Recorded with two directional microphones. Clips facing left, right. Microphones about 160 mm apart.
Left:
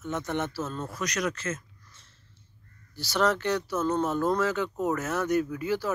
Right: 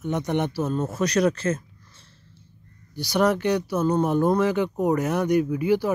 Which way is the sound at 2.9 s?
15° right (ahead or behind).